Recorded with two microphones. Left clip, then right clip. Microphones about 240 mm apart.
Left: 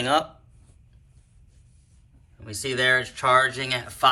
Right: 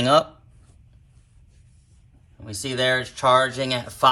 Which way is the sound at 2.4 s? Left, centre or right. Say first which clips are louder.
Even; centre.